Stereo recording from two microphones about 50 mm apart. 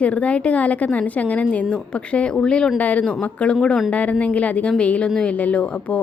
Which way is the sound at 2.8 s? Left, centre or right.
Left.